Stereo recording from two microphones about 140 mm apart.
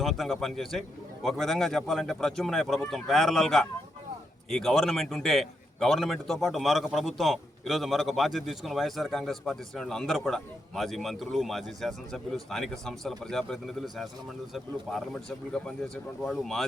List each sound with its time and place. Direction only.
0.0 s a man's voice: centre (ahead or behind)